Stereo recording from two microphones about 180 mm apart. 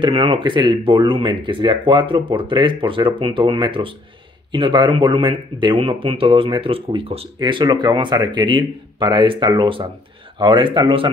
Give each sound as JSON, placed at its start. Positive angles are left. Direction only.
{"t": 0.0, "sound": "speech", "side_deg": -30}